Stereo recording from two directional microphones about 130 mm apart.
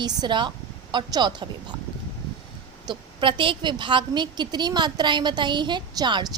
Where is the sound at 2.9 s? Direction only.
40° right (ahead or behind).